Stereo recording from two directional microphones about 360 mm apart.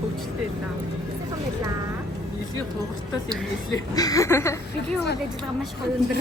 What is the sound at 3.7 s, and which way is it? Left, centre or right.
Speech, centre.